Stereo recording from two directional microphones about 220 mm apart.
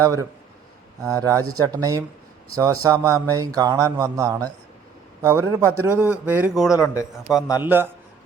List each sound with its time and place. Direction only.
0.0 s speech: 15° right (ahead or behind)
6.7 s a man's voice: 15° left (ahead or behind)
7.6 s speech: 10° right (ahead or behind)